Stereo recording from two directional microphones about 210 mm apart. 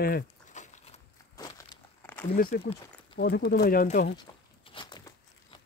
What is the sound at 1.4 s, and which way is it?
Crumpling, 10° left (ahead or behind).